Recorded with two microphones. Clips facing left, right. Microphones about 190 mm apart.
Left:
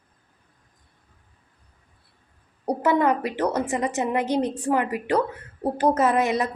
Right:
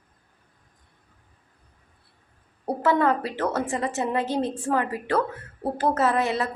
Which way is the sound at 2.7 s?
15° left (ahead or behind).